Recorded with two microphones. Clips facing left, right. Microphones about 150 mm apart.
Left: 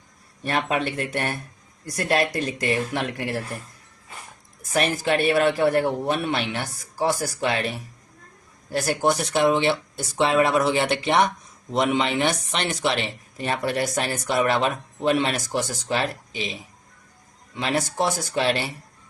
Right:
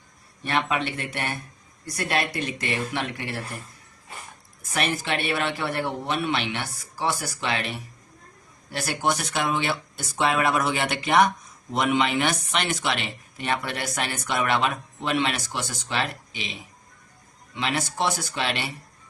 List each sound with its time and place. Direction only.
0.4 s speech: 40° left (ahead or behind)
4.7 s speech: 40° left (ahead or behind)
8.7 s speech: 35° left (ahead or behind)